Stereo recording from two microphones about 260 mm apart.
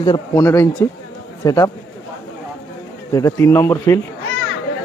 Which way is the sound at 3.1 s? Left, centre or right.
Centre.